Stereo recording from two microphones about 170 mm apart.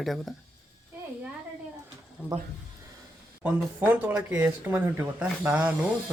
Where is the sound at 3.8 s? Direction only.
10° right (ahead or behind).